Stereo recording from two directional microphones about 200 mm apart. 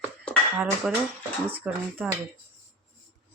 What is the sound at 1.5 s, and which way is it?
Speech, 10° right (ahead or behind).